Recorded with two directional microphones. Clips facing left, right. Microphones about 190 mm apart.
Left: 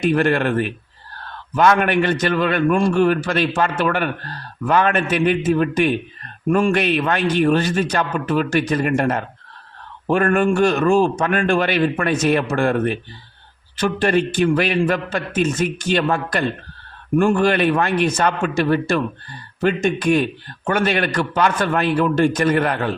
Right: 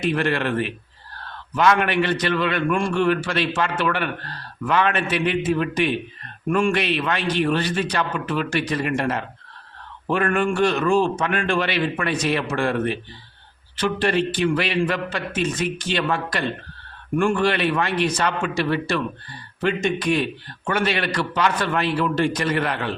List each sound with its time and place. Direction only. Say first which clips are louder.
0.0 s a man's voice: left 5 dB; 45° left (ahead or behind)